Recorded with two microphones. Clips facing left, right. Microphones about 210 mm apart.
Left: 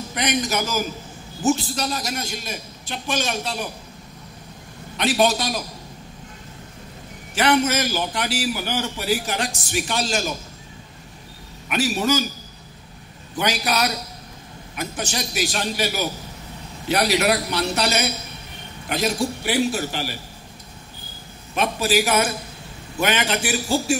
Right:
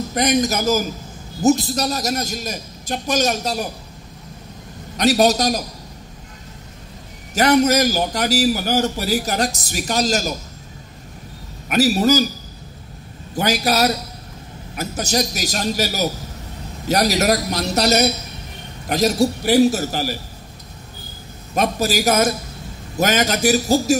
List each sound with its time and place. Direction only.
0.1 s a man's voice: 40° right (ahead or behind)
4.9 s a man's voice: 40° right (ahead or behind)
7.3 s a man's voice: 40° right (ahead or behind)
11.7 s a man's voice: 40° right (ahead or behind)
13.4 s a man's voice: 40° right (ahead or behind)
21.5 s a man's voice: 40° right (ahead or behind)